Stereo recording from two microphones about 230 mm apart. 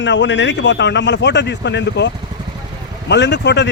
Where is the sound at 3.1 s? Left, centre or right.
Left.